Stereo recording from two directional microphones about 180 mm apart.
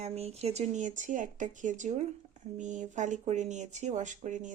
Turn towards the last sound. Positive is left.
turn(degrees=-45)  # may be behind; listen again after turning